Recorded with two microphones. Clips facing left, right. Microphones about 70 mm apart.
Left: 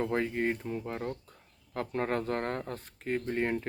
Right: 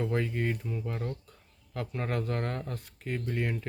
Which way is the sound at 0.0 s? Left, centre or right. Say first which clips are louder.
Left 1 dB; left.